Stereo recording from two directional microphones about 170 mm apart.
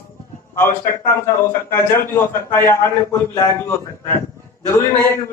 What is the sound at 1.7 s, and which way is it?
A man's voice, 15° left (ahead or behind).